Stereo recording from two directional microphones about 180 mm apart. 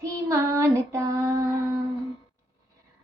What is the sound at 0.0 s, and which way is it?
Child singing, 15° right (ahead or behind).